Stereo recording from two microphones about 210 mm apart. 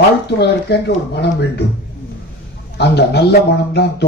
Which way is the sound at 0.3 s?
50° left (ahead or behind).